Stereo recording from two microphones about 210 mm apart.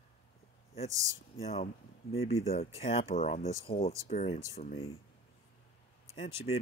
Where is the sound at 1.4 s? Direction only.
30° left (ahead or behind).